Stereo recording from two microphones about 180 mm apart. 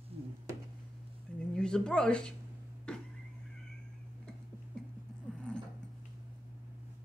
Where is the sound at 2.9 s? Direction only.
5° left (ahead or behind).